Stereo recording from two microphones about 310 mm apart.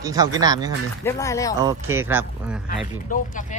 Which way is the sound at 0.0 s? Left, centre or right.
Centre.